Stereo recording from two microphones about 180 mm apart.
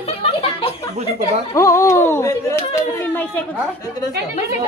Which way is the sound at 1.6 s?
15° left (ahead or behind).